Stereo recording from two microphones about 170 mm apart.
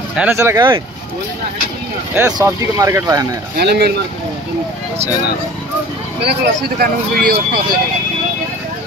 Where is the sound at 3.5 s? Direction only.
70° right (ahead or behind).